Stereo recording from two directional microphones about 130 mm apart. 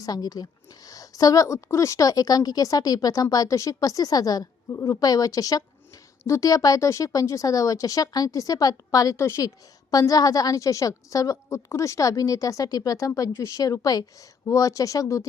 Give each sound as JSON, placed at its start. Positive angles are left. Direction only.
{"t": 0.0, "sound": "a woman's voice", "side_deg": 30}